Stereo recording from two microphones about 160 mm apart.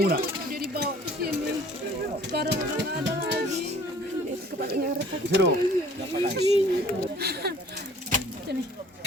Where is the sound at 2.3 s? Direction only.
85° right.